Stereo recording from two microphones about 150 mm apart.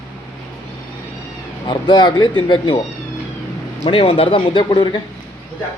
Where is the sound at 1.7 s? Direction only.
30° left (ahead or behind).